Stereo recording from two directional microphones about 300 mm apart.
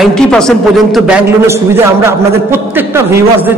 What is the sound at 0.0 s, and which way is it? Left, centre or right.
A man's voice, centre.